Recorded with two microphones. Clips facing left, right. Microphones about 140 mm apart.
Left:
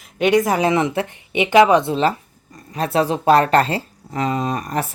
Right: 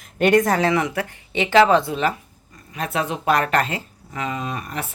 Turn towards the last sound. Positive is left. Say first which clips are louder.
# left 6 dB
turn(degrees=40)  # may be behind; listen again after turning